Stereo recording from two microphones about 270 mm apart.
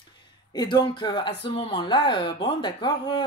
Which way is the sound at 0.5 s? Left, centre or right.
Centre.